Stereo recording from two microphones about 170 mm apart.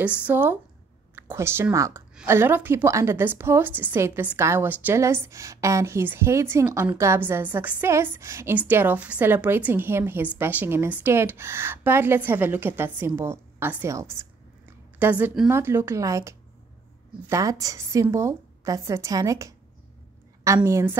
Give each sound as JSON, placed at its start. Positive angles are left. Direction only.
{"t": 0.0, "sound": "a woman's voice", "side_deg": -10}